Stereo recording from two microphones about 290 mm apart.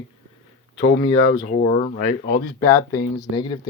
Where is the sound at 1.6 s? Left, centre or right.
Left.